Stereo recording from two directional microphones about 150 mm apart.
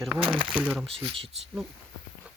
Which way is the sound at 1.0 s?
35° right (ahead or behind).